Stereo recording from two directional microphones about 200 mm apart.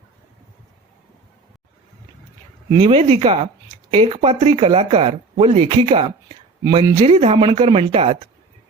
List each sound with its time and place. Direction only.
2.6 s speech: 25° right (ahead or behind)